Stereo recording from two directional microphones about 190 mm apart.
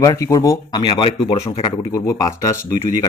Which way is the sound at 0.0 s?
15° left (ahead or behind).